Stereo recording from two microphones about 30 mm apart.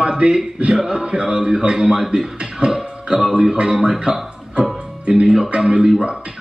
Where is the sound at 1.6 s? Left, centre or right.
Right.